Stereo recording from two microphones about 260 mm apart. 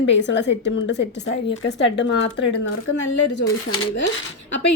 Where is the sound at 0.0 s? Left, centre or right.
Left.